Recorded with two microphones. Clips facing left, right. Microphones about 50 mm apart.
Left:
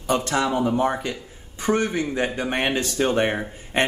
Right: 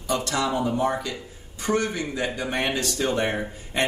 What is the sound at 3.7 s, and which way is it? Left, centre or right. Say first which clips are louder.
Speech: left 3 dB; left.